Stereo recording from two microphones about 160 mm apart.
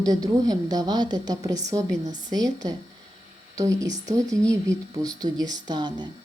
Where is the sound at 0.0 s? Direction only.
25° right (ahead or behind).